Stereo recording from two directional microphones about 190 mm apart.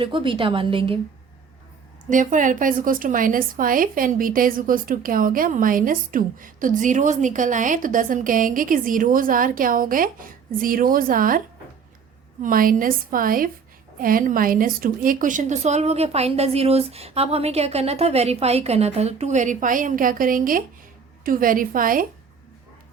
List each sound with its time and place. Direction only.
0.0 s a woman's voice: 25° right (ahead or behind)
2.0 s a woman's voice: 45° right (ahead or behind)